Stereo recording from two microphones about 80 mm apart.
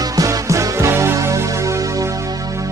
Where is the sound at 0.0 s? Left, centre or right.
Right.